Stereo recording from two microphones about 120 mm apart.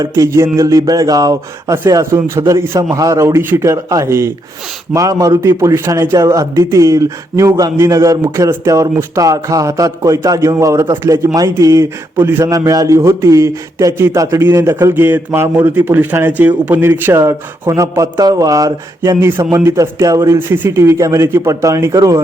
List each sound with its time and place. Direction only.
0.0 s a man's voice: 25° right (ahead or behind)